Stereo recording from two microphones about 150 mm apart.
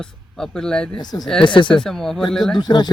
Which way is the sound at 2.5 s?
30° left (ahead or behind).